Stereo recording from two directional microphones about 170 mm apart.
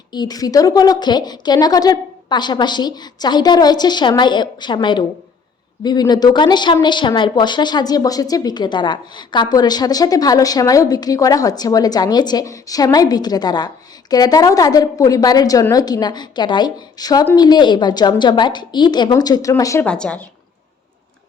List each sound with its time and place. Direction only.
0.1 s a woman's voice: 25° left (ahead or behind)
19.8 s a woman's voice: 5° left (ahead or behind)